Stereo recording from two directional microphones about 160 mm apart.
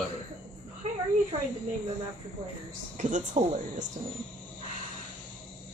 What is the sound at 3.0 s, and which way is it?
Speech, 50° right (ahead or behind).